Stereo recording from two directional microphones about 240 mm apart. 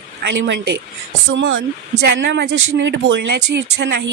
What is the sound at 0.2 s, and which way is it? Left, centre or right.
Speech, right.